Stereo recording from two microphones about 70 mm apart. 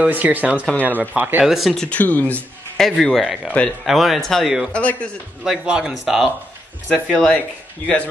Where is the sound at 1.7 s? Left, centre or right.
Left.